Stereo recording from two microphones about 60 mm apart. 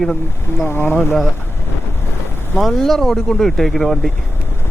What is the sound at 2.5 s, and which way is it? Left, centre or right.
Speech, centre.